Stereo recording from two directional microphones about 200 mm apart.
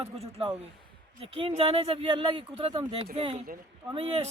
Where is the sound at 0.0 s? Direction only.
30° right (ahead or behind).